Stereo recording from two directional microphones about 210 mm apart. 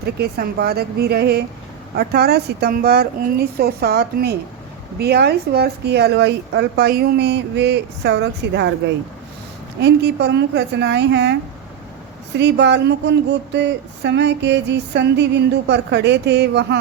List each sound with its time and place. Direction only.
0.0 s a woman's voice: 50° right (ahead or behind)
9.8 s speech: 55° right (ahead or behind)